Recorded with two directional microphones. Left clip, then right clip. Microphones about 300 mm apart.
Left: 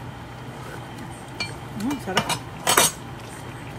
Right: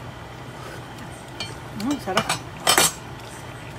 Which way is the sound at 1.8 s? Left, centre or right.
Centre.